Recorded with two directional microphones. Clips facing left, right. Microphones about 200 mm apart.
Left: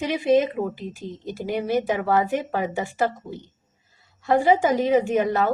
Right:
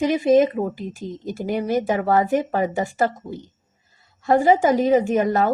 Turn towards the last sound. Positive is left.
turn(degrees=-45)  # may be behind; listen again after turning